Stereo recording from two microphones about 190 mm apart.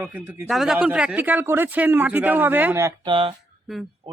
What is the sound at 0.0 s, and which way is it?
Speech, 10° right (ahead or behind).